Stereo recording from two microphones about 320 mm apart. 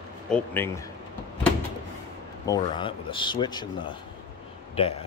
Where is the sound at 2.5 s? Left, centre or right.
Centre.